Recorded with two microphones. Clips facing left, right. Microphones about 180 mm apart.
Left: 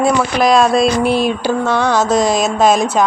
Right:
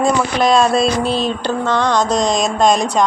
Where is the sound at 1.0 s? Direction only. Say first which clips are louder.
Left 3 dB; 10° left (ahead or behind).